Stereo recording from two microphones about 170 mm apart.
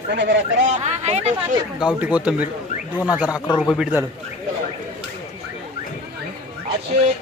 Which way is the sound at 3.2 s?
20° left (ahead or behind).